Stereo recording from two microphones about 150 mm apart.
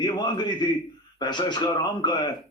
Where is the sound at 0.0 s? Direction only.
30° left (ahead or behind).